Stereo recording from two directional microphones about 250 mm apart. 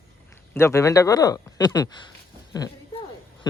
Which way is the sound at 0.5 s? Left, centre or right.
Centre.